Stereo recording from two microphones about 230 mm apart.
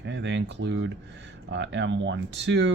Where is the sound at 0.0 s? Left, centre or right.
Right.